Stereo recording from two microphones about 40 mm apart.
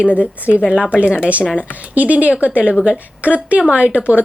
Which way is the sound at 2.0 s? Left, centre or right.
Right.